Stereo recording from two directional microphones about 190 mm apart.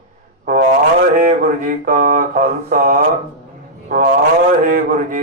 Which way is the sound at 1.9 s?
45° right (ahead or behind).